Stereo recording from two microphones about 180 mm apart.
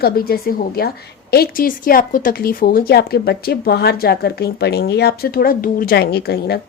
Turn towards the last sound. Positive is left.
turn(degrees=60)  # may be behind; listen again after turning